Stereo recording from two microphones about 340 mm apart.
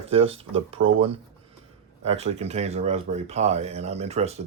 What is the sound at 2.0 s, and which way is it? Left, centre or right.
Speech, centre.